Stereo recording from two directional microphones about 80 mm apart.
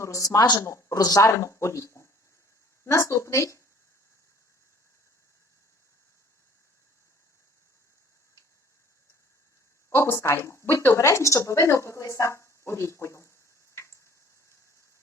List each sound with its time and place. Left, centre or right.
0.0 s speech: left
0.6 s speech: left
9.9 s speech: left